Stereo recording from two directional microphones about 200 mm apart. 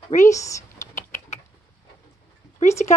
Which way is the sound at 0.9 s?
35° left (ahead or behind).